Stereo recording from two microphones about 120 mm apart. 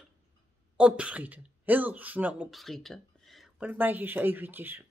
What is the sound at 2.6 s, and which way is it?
Speech, centre (ahead or behind).